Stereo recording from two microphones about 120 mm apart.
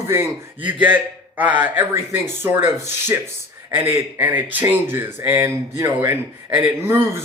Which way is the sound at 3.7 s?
20° right (ahead or behind).